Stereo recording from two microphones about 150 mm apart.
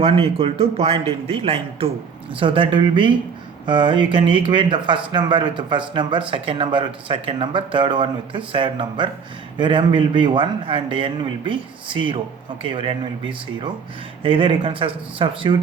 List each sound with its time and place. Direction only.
0.0 s speech: 40° right (ahead or behind)